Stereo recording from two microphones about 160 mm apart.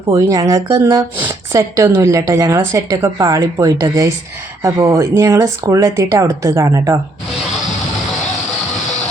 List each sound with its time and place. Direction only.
0.1 s speech: 20° right (ahead or behind)